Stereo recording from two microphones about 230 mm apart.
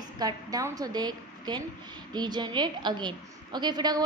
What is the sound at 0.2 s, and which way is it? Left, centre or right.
A woman's voice, centre.